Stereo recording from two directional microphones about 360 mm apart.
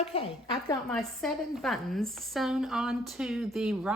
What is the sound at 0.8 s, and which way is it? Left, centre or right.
A woman's voice, centre.